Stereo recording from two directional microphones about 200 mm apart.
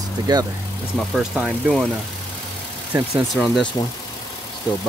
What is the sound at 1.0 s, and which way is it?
Speech, 5° right (ahead or behind).